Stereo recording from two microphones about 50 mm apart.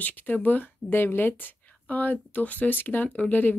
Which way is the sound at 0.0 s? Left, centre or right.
Left.